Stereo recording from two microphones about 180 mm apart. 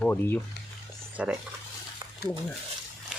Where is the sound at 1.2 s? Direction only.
5° right (ahead or behind).